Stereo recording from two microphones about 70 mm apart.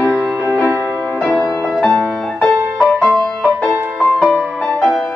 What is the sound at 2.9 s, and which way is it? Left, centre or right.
Music, centre.